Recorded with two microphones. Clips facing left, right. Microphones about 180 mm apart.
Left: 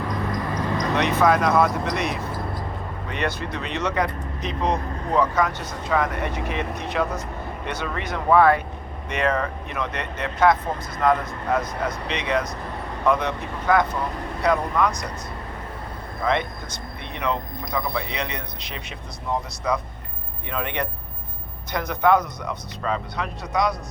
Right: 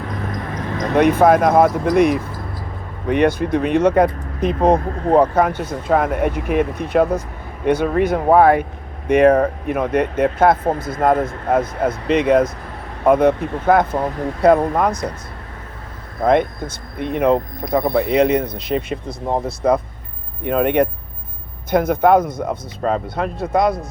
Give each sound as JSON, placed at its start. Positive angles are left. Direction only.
{"t": 0.3, "sound": "speech", "side_deg": -50}
{"t": 16.2, "sound": "speech", "side_deg": -50}